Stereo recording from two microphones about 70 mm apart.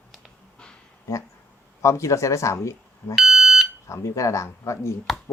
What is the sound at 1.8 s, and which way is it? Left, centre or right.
Speech, left.